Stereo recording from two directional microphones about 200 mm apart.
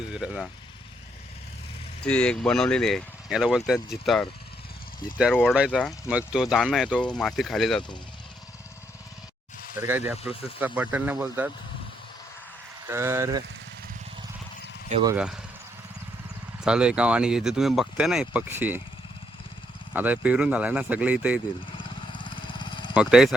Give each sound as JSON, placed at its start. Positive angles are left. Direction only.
{"t": 0.1, "sound": "speech", "side_deg": -5}
{"t": 2.0, "sound": "speech", "side_deg": 5}
{"t": 9.8, "sound": "speech", "side_deg": -10}
{"t": 12.9, "sound": "speech", "side_deg": -10}
{"t": 15.1, "sound": "speech", "side_deg": -5}
{"t": 16.6, "sound": "speech", "side_deg": -5}
{"t": 19.9, "sound": "speech", "side_deg": -10}
{"t": 21.8, "sound": "a sound", "side_deg": 25}
{"t": 23.0, "sound": "speech", "side_deg": 0}